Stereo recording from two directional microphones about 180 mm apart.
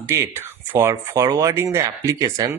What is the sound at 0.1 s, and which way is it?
Speech, 15° right (ahead or behind).